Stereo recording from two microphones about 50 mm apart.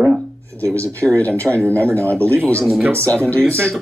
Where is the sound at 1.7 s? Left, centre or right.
Left.